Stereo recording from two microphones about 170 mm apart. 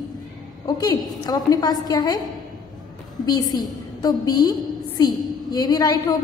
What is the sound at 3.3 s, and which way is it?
A woman's voice, 25° left (ahead or behind).